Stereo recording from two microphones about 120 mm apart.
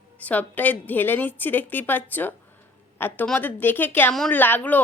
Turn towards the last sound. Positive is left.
turn(degrees=15)  # may be behind; listen again after turning